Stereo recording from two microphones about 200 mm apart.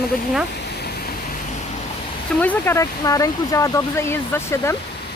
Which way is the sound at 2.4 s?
10° left (ahead or behind).